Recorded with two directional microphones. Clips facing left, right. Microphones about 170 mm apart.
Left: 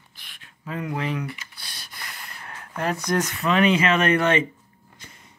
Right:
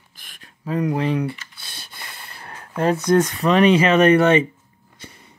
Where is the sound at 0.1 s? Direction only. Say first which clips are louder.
Right 4 dB; 45° right (ahead or behind); by 3.0 s 30° right (ahead or behind).